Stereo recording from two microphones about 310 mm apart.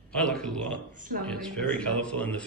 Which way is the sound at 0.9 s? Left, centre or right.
Right.